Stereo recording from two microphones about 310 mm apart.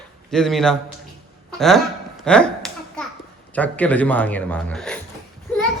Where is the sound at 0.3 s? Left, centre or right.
Centre.